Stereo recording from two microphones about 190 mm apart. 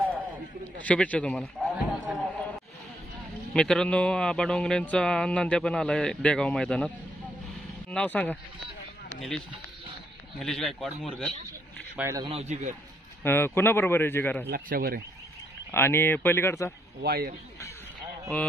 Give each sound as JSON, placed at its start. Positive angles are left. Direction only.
{"t": 0.8, "sound": "a sound", "side_deg": 5}
{"t": 3.5, "sound": "speech", "side_deg": 5}
{"t": 7.9, "sound": "speech", "side_deg": 10}
{"t": 10.4, "sound": "speech", "side_deg": 0}
{"t": 12.0, "sound": "speech", "side_deg": -15}
{"t": 12.3, "sound": "a man's voice", "side_deg": -35}
{"t": 13.2, "sound": "speech", "side_deg": 10}
{"t": 14.5, "sound": "speech", "side_deg": -50}
{"t": 15.7, "sound": "speech", "side_deg": 10}
{"t": 17.0, "sound": "speech", "side_deg": -55}